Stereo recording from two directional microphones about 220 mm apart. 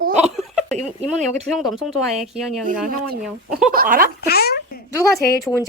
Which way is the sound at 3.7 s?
40° right (ahead or behind).